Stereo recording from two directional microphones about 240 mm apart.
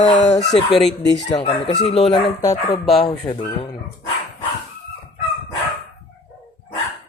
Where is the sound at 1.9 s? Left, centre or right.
Left.